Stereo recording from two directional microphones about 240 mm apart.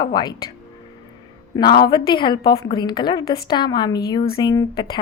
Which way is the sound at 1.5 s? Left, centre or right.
Centre.